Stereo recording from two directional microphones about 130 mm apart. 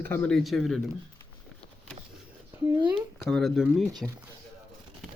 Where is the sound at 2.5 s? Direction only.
20° right (ahead or behind).